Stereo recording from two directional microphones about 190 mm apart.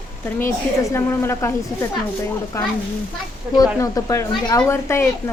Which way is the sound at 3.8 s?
15° left (ahead or behind).